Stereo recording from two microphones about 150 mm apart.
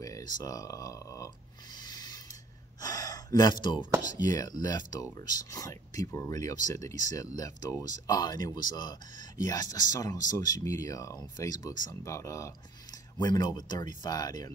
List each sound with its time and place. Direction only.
0.0 s speech: 25° left (ahead or behind)
1.8 s a sound: 25° left (ahead or behind)
2.8 s speech: 25° left (ahead or behind)